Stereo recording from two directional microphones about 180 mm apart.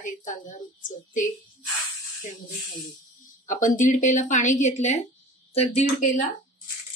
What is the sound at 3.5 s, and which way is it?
A woman's voice, 45° left (ahead or behind).